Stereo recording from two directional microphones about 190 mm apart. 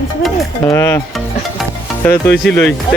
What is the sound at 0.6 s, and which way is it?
Speech, 15° left (ahead or behind).